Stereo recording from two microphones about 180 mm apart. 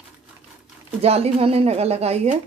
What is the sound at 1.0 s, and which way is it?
Speech, 35° right (ahead or behind).